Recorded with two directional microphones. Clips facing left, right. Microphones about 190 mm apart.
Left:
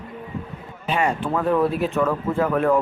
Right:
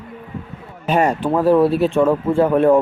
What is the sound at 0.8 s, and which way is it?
Speech, 40° right (ahead or behind).